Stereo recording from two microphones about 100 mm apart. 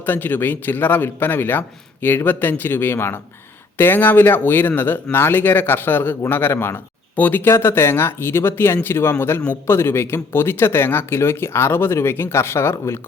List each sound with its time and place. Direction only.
0.0 s speech: 20° left (ahead or behind)